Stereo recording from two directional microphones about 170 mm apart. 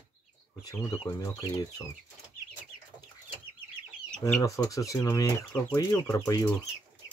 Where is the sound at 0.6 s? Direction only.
20° left (ahead or behind).